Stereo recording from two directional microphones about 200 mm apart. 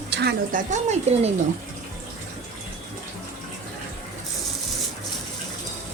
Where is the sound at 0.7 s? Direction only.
35° right (ahead or behind).